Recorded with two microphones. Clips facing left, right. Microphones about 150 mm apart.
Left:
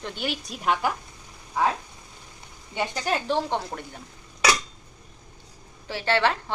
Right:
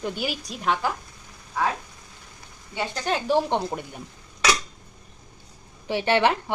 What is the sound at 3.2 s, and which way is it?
Speech, 15° right (ahead or behind).